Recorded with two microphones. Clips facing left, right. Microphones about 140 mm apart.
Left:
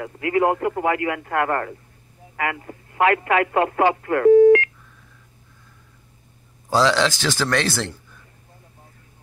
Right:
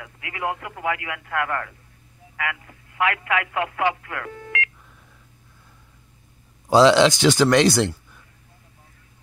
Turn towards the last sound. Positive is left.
turn(degrees=-15)  # may be behind; listen again after turning